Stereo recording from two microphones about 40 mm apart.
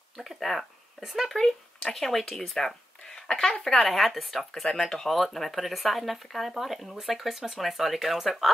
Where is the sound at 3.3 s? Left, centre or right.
Left.